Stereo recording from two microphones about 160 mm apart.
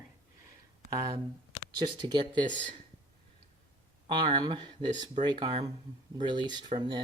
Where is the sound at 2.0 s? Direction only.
30° right (ahead or behind).